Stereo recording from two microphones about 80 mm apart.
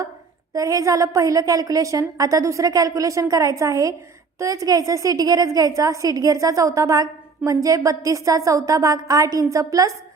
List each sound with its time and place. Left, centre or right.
0.5 s a woman's voice: right